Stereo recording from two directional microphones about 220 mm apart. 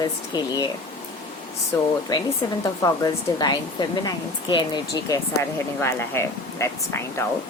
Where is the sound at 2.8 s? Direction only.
15° left (ahead or behind).